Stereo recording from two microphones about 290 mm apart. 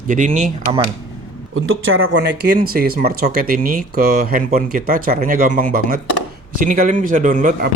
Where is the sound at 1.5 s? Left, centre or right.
Right.